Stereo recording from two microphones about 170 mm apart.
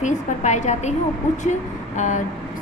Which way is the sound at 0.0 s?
45° left (ahead or behind).